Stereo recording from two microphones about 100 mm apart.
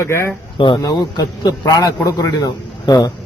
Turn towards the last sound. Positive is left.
turn(degrees=40)  # may be behind; listen again after turning